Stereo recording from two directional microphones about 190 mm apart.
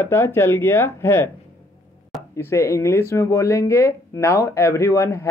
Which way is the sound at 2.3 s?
15° left (ahead or behind).